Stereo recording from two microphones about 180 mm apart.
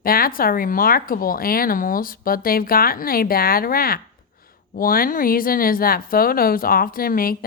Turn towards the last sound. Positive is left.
turn(degrees=55)  # may be behind; listen again after turning